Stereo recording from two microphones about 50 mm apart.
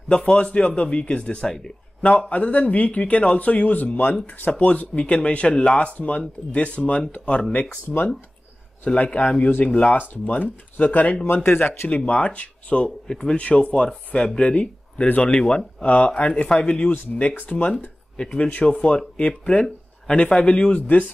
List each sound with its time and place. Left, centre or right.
0.1 s speech: centre
7.8 s speech: left
8.8 s speech: left
11.4 s speech: left
12.1 s speech: left
12.8 s speech: centre
13.4 s speech: left
16.9 s speech: left
18.1 s speech: left
20.8 s speech: left